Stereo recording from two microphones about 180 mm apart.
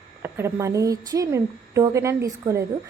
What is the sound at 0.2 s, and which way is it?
A woman's voice, 15° right (ahead or behind).